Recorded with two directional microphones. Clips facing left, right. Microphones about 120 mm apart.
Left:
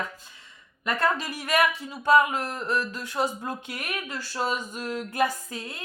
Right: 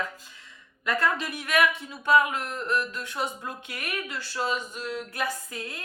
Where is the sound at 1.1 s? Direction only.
35° left (ahead or behind).